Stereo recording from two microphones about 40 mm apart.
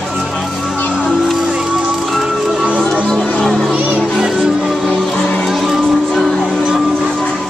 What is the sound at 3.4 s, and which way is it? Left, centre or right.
Music, centre.